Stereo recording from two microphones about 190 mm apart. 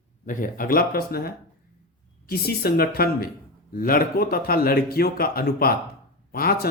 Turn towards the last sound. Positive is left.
turn(degrees=50)  # may be behind; listen again after turning